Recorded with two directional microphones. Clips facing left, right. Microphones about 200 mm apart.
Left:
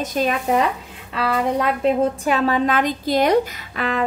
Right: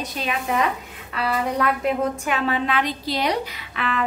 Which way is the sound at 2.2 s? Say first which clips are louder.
Left 5 dB; 40° left (ahead or behind).